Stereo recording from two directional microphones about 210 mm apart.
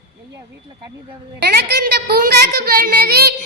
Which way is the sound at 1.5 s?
50° right (ahead or behind).